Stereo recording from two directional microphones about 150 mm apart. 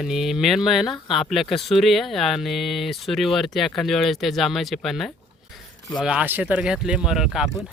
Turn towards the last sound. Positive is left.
turn(degrees=-5)  # may be behind; listen again after turning